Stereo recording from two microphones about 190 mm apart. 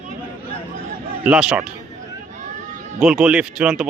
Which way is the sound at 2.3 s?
40° right (ahead or behind).